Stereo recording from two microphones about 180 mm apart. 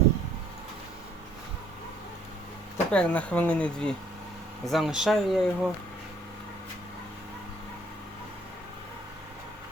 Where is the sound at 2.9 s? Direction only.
5° left (ahead or behind).